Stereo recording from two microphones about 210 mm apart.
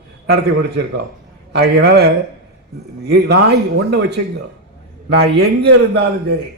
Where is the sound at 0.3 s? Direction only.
50° right (ahead or behind).